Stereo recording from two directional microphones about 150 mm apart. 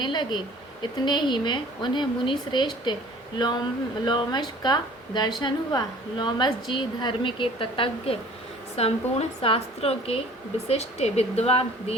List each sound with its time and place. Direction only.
0.0 s a woman's voice: 30° left (ahead or behind)